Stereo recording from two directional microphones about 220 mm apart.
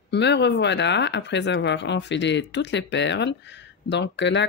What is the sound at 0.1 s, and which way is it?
Speech, 50° left (ahead or behind).